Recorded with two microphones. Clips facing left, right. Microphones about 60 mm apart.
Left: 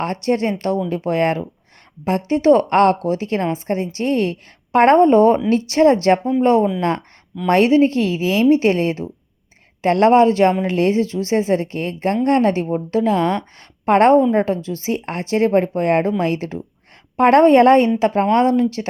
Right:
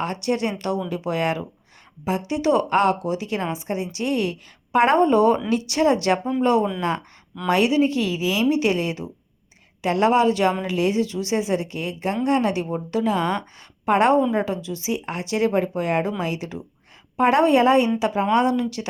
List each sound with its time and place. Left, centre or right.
0.0 s a woman's voice: left